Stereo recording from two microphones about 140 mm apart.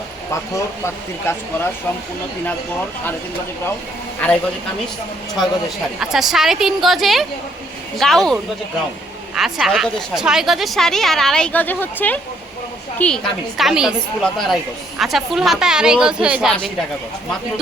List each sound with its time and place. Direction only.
0.3 s speech: 20° left (ahead or behind)
4.2 s a man's voice: 10° left (ahead or behind)
6.0 s a woman's voice: centre (ahead or behind)